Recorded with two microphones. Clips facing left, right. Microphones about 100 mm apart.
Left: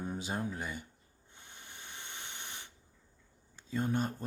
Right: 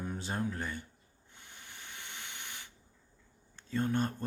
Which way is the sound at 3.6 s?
5° left (ahead or behind).